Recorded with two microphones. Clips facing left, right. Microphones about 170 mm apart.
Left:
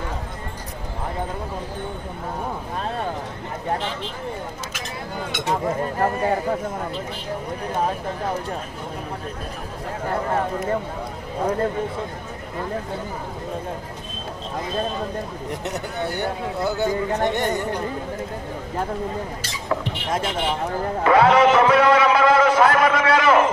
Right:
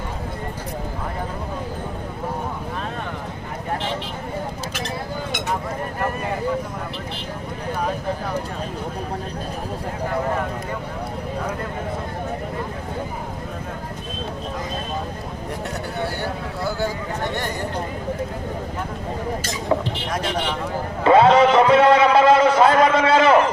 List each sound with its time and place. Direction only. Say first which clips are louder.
16.1 s speech: left 2 dB; 20° left (ahead or behind)
21.0 s music: right 2 dB; 25° right (ahead or behind)